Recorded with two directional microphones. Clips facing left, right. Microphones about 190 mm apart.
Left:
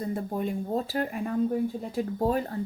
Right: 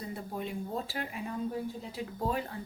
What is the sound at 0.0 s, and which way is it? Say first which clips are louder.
Speech: left 8 dB; 45° left (ahead or behind).